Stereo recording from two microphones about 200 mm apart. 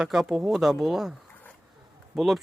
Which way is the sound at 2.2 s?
Centre (ahead or behind).